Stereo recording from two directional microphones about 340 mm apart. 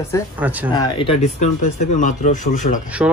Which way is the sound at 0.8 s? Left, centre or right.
Centre.